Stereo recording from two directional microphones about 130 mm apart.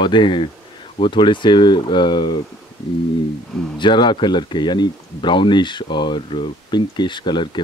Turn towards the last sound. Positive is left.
turn(degrees=35)  # may be behind; listen again after turning